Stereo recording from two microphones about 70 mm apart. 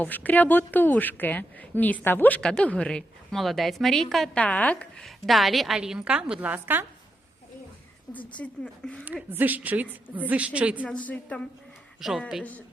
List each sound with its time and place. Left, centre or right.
0.0 s a woman's voice: left
2.4 s speech: centre
3.3 s a woman's voice: centre
4.4 s a woman's voice: centre
5.0 s a woman's voice: centre
6.4 s a woman's voice: right
8.1 s speech: centre
9.3 s a woman's voice: right
10.8 s speech: centre
11.9 s a woman's voice: centre
12.4 s a woman's voice: left